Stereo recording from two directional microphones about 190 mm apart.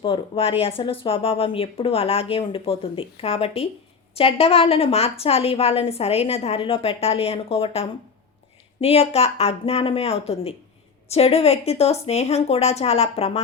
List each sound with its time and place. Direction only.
0.0 s a woman's voice: 25° left (ahead or behind)